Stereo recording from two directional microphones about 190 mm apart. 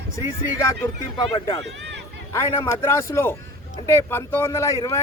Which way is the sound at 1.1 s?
25° left (ahead or behind).